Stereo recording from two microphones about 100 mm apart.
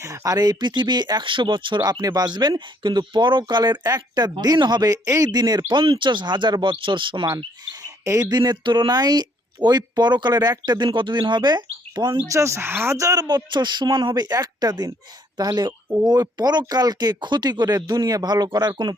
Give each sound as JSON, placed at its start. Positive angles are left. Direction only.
{"t": 0.0, "sound": "speech", "side_deg": -30}
{"t": 5.8, "sound": "speech", "side_deg": -60}
{"t": 7.3, "sound": "speech", "side_deg": -40}
{"t": 12.3, "sound": "speech", "side_deg": -30}